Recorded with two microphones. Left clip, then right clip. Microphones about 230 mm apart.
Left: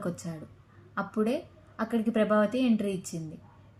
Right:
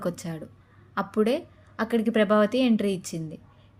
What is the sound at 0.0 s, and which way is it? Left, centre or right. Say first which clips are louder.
A woman's voice: right 5 dB; right.